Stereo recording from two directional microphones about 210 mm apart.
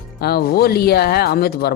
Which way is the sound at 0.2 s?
50° left (ahead or behind).